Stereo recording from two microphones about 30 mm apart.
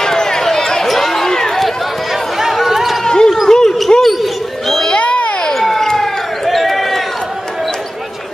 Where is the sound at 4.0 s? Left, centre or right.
Centre.